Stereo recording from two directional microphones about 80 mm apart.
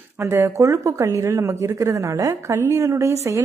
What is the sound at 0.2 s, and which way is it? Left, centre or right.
Speech, right.